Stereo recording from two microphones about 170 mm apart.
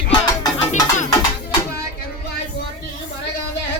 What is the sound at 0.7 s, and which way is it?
Music, 45° left (ahead or behind).